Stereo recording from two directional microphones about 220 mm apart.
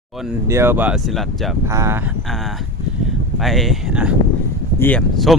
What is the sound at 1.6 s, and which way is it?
Speech, 10° right (ahead or behind).